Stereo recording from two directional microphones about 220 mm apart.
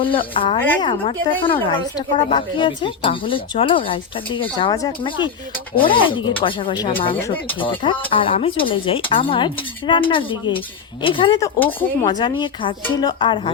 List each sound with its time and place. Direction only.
0.0 s a woman's voice: 25° left (ahead or behind)